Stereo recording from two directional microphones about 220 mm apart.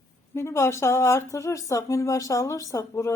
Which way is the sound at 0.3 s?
10° left (ahead or behind).